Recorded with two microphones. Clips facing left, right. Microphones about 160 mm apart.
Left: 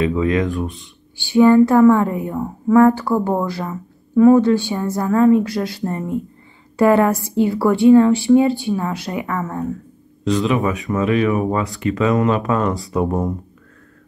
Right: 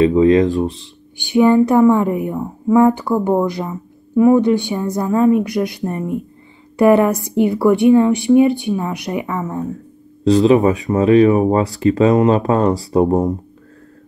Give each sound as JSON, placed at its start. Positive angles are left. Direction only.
{"t": 0.0, "sound": "speech", "side_deg": -30}
{"t": 1.1, "sound": "a woman's voice", "side_deg": -20}
{"t": 10.2, "sound": "speech", "side_deg": -30}